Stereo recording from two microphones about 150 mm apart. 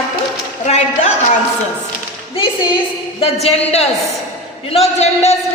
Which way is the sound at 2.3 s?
35° left (ahead or behind).